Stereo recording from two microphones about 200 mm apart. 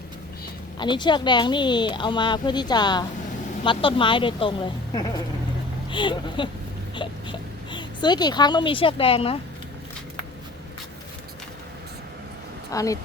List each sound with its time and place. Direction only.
0.8 s speech: 20° left (ahead or behind)
12.7 s speech: 15° left (ahead or behind)